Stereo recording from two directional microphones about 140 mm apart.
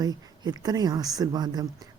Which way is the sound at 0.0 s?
30° right (ahead or behind).